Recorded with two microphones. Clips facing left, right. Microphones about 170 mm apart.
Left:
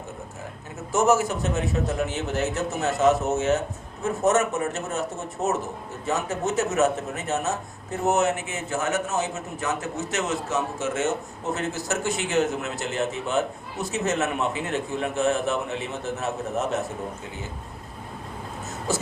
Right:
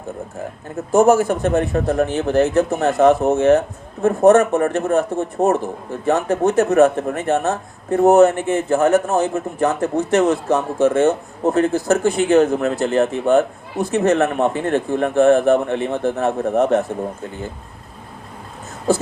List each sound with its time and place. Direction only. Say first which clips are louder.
0.9 s speech: right 8 dB; 55° right (ahead or behind)